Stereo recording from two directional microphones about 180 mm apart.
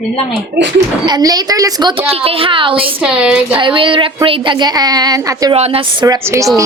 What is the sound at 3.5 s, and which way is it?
A woman's voice, 30° right (ahead or behind).